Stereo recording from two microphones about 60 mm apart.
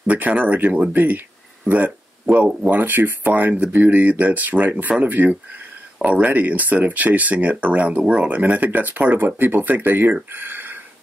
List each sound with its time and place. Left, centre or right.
0.0 s speech: right
5.9 s speech: centre; by 10.1 s right
10.3 s a sound: right